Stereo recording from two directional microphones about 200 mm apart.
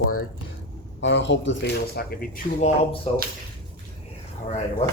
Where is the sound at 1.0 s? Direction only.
65° left (ahead or behind); by 2.4 s 45° left (ahead or behind).